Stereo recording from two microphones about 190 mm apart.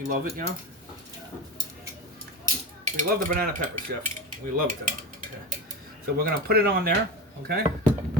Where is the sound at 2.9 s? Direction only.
45° right (ahead or behind).